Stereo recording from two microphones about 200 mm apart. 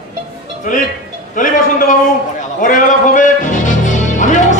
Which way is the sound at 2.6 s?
40° left (ahead or behind).